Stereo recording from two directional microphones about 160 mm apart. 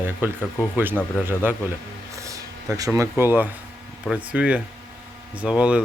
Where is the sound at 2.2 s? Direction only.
20° right (ahead or behind).